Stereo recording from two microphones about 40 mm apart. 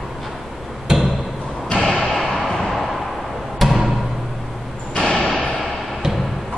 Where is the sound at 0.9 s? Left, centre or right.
Centre.